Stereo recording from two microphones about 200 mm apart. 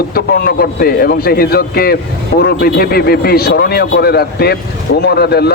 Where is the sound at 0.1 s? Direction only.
50° left (ahead or behind).